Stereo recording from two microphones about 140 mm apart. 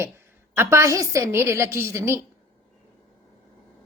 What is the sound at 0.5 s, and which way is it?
A woman's voice, 15° right (ahead or behind).